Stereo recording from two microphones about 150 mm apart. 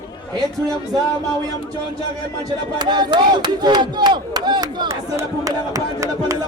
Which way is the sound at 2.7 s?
30° right (ahead or behind).